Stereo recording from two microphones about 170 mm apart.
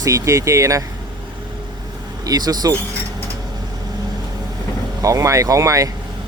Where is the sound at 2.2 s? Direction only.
20° right (ahead or behind).